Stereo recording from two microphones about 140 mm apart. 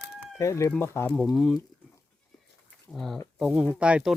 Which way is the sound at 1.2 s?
Centre (ahead or behind).